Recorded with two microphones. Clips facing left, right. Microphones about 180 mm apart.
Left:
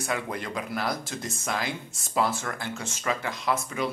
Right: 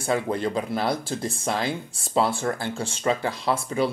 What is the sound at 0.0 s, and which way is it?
Speech, 30° right (ahead or behind).